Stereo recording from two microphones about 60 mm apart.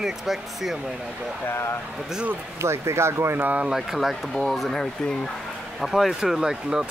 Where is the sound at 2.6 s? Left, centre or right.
Right.